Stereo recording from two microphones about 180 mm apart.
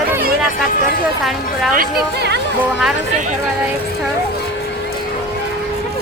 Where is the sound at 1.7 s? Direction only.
60° right (ahead or behind).